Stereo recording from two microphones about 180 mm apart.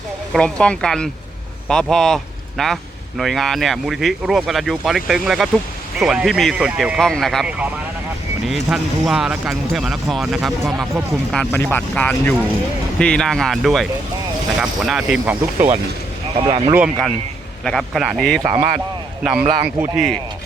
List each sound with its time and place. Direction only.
0.3 s speech: 5° left (ahead or behind)
16.5 s speech: 35° right (ahead or behind)
16.7 s speech: 5° right (ahead or behind)
18.4 s speech: 40° right (ahead or behind)
19.2 s speech: 5° right (ahead or behind)